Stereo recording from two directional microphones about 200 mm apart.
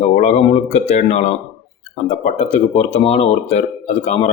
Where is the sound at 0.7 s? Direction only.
35° left (ahead or behind).